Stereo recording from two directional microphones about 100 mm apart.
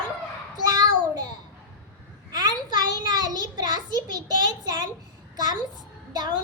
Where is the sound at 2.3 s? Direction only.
45° right (ahead or behind).